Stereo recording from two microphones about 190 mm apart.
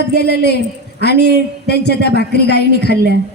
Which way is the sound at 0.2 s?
60° left (ahead or behind).